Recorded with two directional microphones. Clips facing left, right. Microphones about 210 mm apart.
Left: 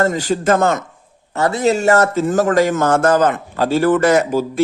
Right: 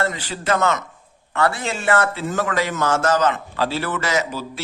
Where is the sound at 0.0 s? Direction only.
45° left (ahead or behind).